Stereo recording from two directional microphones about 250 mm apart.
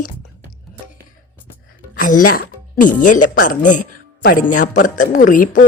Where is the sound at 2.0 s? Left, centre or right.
Left.